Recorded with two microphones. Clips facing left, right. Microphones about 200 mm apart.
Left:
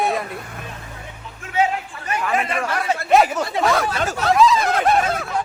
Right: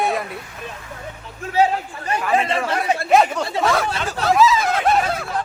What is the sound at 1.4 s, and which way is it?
A man's voice, 35° right (ahead or behind).